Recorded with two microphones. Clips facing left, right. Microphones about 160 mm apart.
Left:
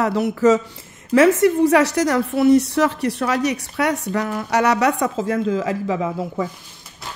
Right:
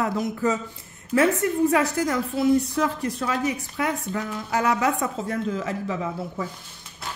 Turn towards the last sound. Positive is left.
turn(degrees=90)